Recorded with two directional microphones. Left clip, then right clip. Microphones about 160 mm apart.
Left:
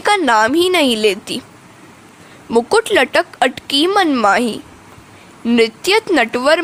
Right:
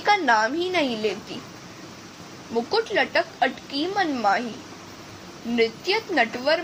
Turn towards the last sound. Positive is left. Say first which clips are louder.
# left 9 dB
turn(degrees=65)  # may be behind; listen again after turning